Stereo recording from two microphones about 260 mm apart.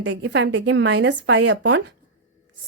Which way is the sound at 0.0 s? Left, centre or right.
Right.